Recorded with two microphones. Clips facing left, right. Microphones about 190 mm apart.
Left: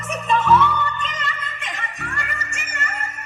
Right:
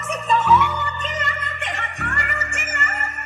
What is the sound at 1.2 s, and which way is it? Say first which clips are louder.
Music: right 2 dB; 50° right (ahead or behind).